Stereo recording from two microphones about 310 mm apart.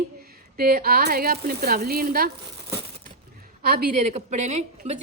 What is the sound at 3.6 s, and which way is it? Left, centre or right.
A woman's voice, right.